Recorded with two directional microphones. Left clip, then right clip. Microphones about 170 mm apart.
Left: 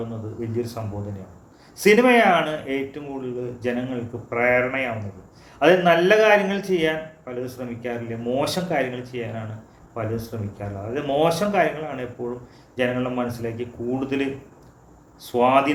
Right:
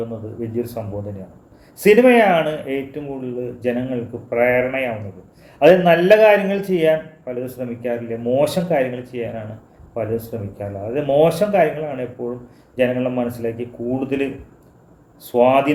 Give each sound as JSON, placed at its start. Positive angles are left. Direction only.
{"t": 0.3, "sound": "a man's voice", "side_deg": -20}
{"t": 1.8, "sound": "a man's voice", "side_deg": -20}